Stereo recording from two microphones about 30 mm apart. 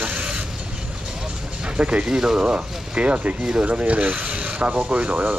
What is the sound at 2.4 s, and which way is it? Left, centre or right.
Speech, right.